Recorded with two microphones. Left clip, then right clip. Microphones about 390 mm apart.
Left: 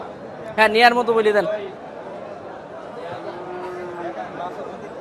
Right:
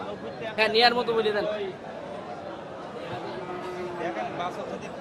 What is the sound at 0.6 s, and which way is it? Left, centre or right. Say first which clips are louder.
Speech: left 7 dB; left.